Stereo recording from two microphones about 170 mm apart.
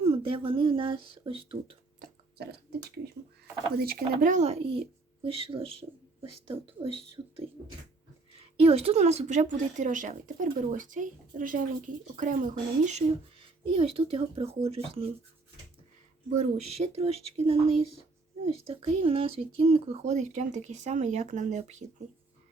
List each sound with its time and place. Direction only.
0.0 s speech: 30° right (ahead or behind)
2.4 s speech: 70° right (ahead or behind)
3.8 s speech: 55° right (ahead or behind); by 7.0 s 35° right (ahead or behind)
8.4 s a woman's voice: 35° right (ahead or behind)
16.3 s speech: 45° right (ahead or behind)